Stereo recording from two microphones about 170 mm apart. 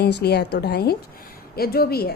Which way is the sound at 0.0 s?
75° left (ahead or behind).